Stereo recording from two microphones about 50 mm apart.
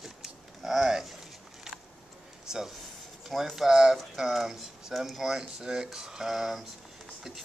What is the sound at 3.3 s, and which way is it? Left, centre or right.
Speech, centre.